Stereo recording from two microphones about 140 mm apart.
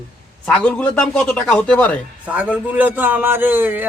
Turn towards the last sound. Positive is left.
turn(degrees=-15)  # may be behind; listen again after turning